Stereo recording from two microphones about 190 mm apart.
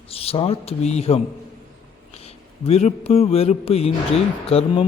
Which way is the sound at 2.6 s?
35° left (ahead or behind).